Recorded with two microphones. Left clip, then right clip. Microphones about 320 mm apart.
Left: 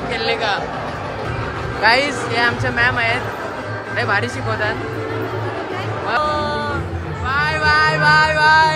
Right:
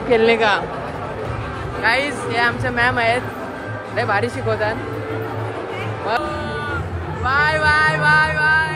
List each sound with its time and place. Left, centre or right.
0.1 s speech: centre
1.8 s female singing: centre
7.2 s female singing: centre